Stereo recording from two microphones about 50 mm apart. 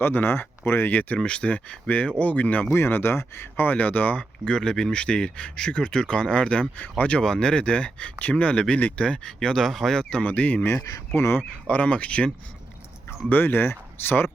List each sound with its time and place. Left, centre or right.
0.0 s speech: left
0.9 s speech: left
1.2 s speech: left
2.6 s speech: left
3.8 s speech: left
4.2 s speech: centre
7.2 s speech: centre; by 8.5 s left
8.5 s speech: centre
9.6 s speech: centre
10.0 s speech: centre
10.2 s speech: left
11.1 s speech: left
11.7 s speech: left
13.3 s speech: left